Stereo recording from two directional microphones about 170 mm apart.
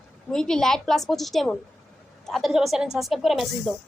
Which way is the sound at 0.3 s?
5° left (ahead or behind).